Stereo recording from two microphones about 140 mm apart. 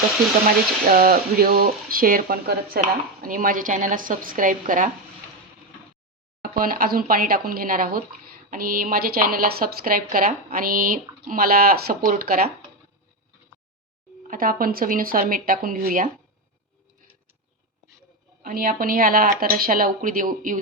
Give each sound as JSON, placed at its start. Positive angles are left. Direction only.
{"t": 0.9, "sound": "speech", "side_deg": -90}
{"t": 6.4, "sound": "speech", "side_deg": -90}
{"t": 14.3, "sound": "speech", "side_deg": -90}
{"t": 18.4, "sound": "speech", "side_deg": -90}